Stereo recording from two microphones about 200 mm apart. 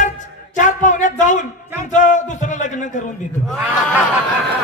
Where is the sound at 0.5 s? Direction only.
40° left (ahead or behind).